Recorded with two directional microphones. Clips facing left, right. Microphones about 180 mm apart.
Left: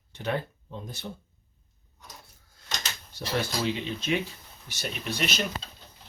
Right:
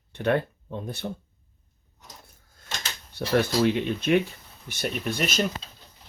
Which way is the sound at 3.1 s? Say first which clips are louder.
Right 7 dB; 55° right (ahead or behind).